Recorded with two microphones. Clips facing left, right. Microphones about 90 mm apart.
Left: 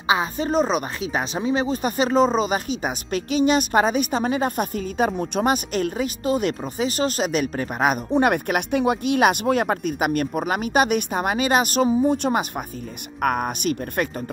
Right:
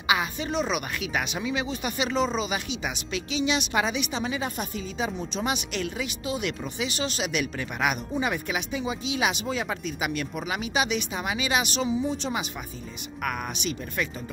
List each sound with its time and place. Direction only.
0.0 s speech: 35° left (ahead or behind)
8.1 s speech: 60° left (ahead or behind)